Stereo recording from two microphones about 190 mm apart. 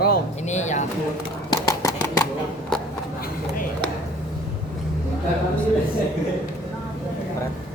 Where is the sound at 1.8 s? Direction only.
15° left (ahead or behind).